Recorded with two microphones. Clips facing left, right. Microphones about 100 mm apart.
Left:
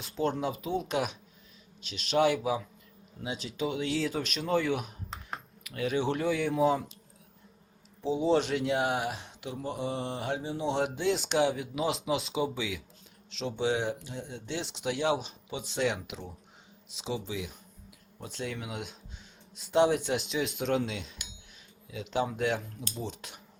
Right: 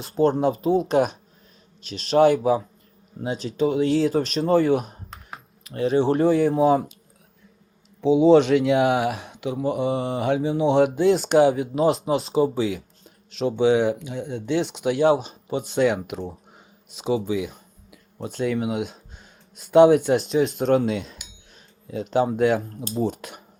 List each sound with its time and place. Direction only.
0.0 s speech: 45° right (ahead or behind)
5.3 s computer keyboard: 5° right (ahead or behind)
5.6 s speech: 30° right (ahead or behind)
6.6 s speech: 55° right (ahead or behind)
8.0 s speech: 70° right (ahead or behind); by 12.8 s 40° right (ahead or behind)
13.3 s speech: 55° right (ahead or behind); by 23.0 s 35° right (ahead or behind)
23.0 s speech: 50° right (ahead or behind)